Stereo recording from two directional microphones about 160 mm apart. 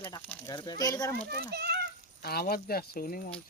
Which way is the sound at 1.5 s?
90° right.